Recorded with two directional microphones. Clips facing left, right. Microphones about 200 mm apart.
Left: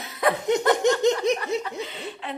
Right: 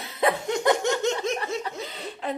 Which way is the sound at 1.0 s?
15° left (ahead or behind).